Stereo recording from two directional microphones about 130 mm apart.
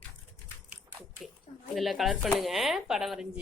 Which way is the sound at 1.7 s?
Centre (ahead or behind).